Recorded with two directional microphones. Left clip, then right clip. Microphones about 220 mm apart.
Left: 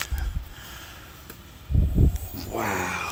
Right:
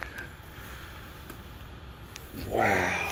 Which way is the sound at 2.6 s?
25° left (ahead or behind).